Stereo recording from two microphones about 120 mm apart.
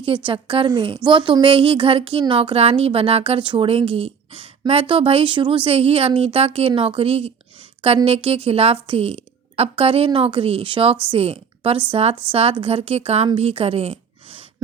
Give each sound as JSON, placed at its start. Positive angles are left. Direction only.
{"t": 0.3, "sound": "a woman's voice", "side_deg": -45}